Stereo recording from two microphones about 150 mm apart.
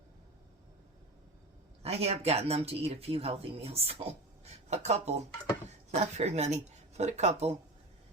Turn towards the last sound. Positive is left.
turn(degrees=-45)  # may be behind; listen again after turning